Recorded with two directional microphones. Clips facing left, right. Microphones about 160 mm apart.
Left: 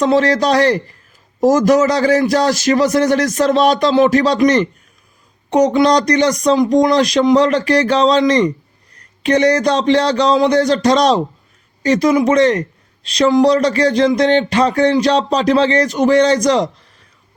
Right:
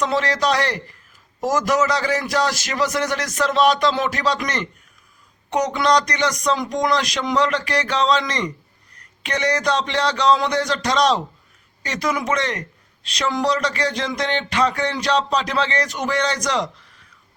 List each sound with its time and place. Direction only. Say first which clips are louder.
0.0 s speech: left 7 dB; 35° left (ahead or behind)